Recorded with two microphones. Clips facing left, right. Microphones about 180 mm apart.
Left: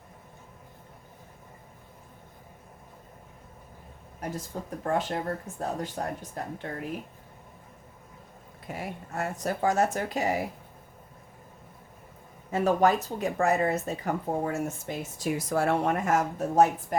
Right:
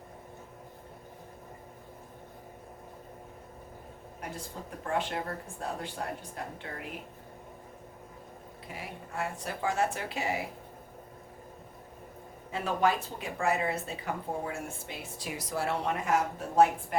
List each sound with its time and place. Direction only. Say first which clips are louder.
4.2 s speech: left 6 dB; 40° left (ahead or behind)
8.6 s speech: left 6 dB; 45° left (ahead or behind)
12.5 s speech: left 6 dB; 45° left (ahead or behind)